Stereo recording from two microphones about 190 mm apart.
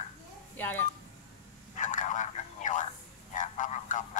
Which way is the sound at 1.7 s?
40° left (ahead or behind).